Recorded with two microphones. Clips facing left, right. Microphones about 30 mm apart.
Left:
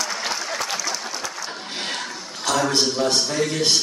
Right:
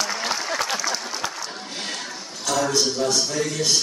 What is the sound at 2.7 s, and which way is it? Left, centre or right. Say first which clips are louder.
A man's voice: left 1 dB; left.